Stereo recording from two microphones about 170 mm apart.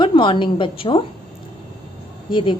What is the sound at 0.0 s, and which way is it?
A woman's voice, 30° left (ahead or behind).